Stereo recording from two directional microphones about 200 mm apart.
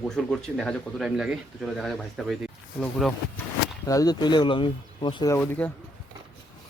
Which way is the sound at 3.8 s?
15° left (ahead or behind).